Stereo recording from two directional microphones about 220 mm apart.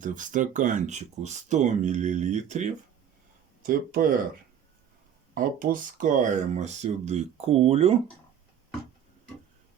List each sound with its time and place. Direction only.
0.0 s speech: 35° right (ahead or behind)
5.3 s speech: 40° right (ahead or behind)